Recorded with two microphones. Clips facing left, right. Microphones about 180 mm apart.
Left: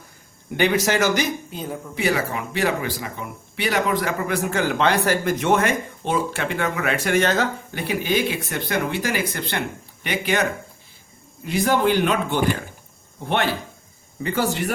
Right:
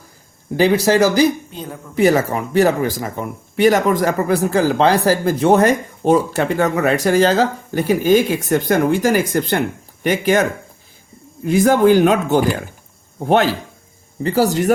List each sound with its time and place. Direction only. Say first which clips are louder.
0.5 s speech: right 6 dB; 35° right (ahead or behind)
2.0 s speech: right 9 dB; 45° right (ahead or behind)
11.4 s speech: right 8 dB; 50° right (ahead or behind)